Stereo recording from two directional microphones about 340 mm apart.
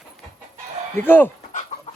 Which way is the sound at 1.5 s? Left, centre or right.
Left.